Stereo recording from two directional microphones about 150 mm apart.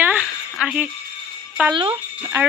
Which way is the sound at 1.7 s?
35° right (ahead or behind).